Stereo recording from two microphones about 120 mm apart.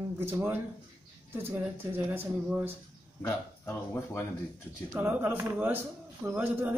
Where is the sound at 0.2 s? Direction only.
20° right (ahead or behind).